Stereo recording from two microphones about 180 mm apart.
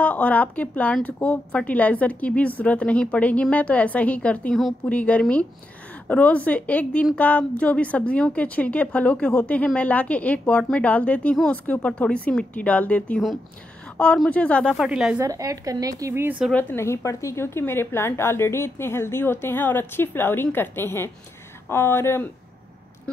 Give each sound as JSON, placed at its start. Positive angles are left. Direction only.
{"t": 0.0, "sound": "a woman's voice", "side_deg": 10}
{"t": 15.1, "sound": "a woman's voice", "side_deg": -20}
{"t": 16.5, "sound": "a woman's voice", "side_deg": 10}
{"t": 23.1, "sound": "a sound", "side_deg": 5}